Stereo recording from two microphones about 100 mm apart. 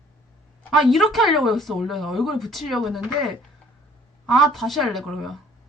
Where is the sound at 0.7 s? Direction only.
Centre (ahead or behind).